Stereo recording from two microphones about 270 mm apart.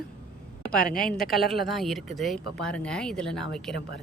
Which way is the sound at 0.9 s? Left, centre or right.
Left.